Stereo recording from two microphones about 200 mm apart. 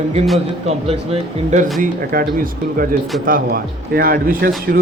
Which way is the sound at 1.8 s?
45° right (ahead or behind).